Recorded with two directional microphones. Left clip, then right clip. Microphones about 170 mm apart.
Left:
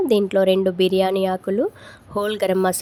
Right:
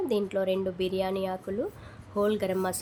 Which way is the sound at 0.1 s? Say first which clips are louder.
Left 12 dB; 50° left (ahead or behind).